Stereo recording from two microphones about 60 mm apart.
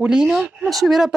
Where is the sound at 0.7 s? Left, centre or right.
Centre.